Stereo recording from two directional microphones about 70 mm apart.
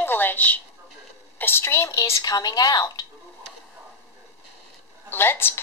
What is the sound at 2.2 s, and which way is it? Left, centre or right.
Speech, left.